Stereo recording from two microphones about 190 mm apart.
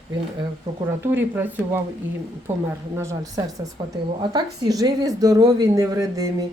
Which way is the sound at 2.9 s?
15° right (ahead or behind).